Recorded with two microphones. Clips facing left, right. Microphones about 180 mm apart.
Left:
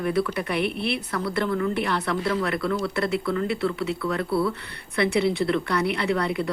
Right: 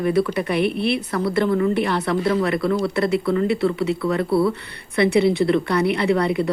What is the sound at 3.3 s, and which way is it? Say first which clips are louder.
Speech: right 5 dB; 10° right (ahead or behind).